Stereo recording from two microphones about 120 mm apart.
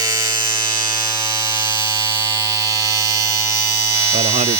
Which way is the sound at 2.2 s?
25° right (ahead or behind).